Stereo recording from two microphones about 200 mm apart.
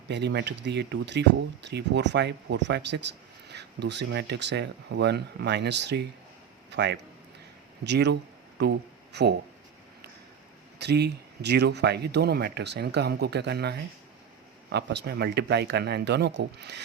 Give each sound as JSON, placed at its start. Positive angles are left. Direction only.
{"t": 0.1, "sound": "speech", "side_deg": -60}
{"t": 10.8, "sound": "speech", "side_deg": -55}